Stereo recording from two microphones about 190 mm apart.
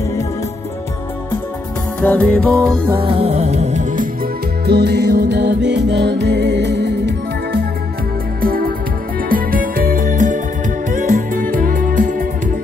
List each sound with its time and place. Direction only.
2.0 s music: 5° left (ahead or behind)
3.0 s music: 30° right (ahead or behind)
4.6 s music: 60° right (ahead or behind)
8.4 s music: 50° right (ahead or behind)